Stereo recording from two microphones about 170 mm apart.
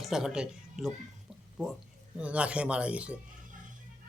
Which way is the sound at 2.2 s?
5° right (ahead or behind).